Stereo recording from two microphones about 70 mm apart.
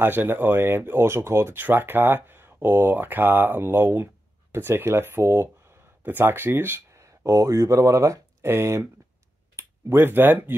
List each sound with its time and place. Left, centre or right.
0.0 s speech: right
6.9 s speech: right